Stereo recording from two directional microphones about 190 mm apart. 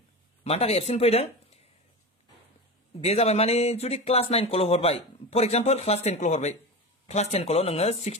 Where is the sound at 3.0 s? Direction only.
35° left (ahead or behind).